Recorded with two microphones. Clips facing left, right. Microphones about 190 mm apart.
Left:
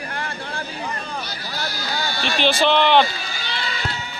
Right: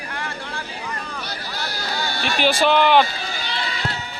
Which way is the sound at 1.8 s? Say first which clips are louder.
Right 1 dB; 60° right (ahead or behind).